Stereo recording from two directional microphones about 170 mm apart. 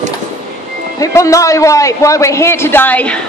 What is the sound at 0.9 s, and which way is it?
A man's voice, 20° left (ahead or behind).